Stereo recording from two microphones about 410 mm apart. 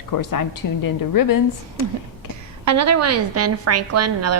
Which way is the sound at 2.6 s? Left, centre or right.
Right.